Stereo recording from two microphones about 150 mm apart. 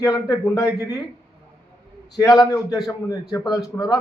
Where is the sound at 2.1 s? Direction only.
25° left (ahead or behind).